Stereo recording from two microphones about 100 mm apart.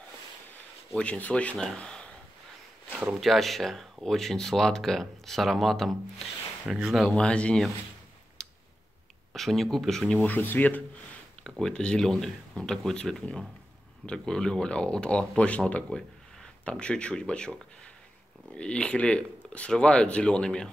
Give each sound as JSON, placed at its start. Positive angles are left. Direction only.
{"t": 0.9, "sound": "speech", "side_deg": 15}
{"t": 3.1, "sound": "speech", "side_deg": 0}
{"t": 7.1, "sound": "speech", "side_deg": 10}
{"t": 8.4, "sound": "clicking", "side_deg": 5}
{"t": 9.3, "sound": "speech", "side_deg": 0}
{"t": 10.1, "sound": "speech", "side_deg": 15}
{"t": 11.6, "sound": "speech", "side_deg": 10}
{"t": 18.6, "sound": "speech", "side_deg": 10}